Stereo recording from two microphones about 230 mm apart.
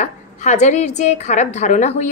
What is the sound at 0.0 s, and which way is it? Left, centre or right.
A woman's voice, left.